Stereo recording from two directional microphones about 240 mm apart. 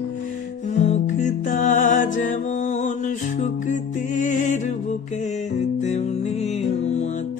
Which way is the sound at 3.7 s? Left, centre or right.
Left.